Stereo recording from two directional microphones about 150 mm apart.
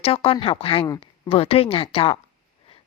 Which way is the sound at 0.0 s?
40° left (ahead or behind).